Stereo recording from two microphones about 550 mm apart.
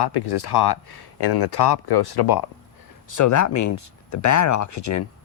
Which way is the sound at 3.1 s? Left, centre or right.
Left.